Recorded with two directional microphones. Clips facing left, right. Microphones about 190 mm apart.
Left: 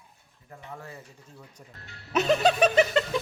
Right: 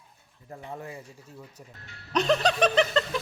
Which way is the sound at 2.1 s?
5° left (ahead or behind).